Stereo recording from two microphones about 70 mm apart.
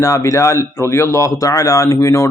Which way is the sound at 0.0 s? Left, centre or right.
Left.